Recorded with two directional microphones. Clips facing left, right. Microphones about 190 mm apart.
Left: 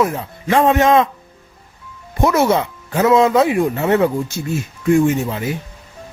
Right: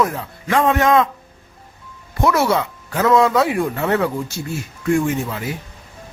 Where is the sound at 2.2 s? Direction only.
20° left (ahead or behind).